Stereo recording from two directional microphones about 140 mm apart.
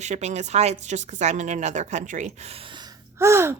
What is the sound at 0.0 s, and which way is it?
A woman's voice, 55° right (ahead or behind).